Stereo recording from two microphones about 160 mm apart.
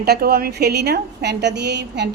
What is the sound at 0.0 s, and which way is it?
A woman's voice, 80° right.